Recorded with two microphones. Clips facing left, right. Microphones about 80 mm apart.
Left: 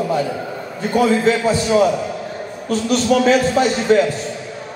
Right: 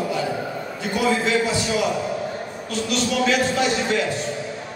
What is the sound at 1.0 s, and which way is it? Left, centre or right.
A man's voice, left.